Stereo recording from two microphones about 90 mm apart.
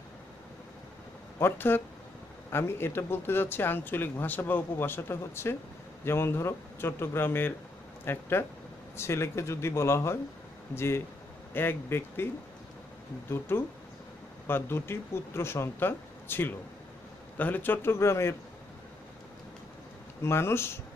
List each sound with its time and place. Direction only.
1.4 s speech: 25° left (ahead or behind)
13.3 s speech: 25° left (ahead or behind)
20.2 s speech: 30° left (ahead or behind)